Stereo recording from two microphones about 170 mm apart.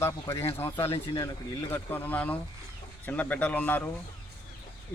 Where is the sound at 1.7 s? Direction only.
10° left (ahead or behind).